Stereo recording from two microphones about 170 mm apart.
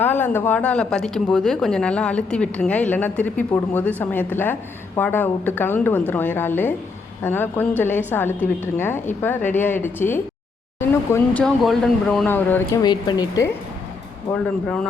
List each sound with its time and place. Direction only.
0.0 s speech: 10° left (ahead or behind)
12.8 s speech: 25° left (ahead or behind)